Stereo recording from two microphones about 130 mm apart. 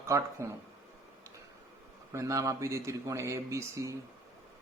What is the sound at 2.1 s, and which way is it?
Speech, 25° right (ahead or behind).